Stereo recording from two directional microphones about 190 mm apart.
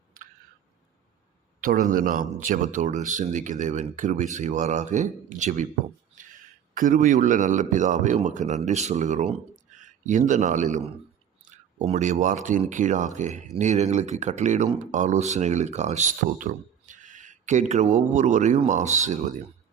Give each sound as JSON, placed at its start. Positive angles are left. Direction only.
{"t": 1.6, "sound": "a man's voice", "side_deg": -45}